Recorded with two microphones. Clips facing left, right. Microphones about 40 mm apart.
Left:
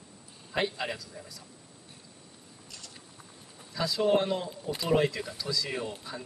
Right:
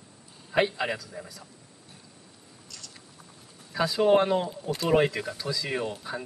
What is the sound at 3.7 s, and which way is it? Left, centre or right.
Speech, right.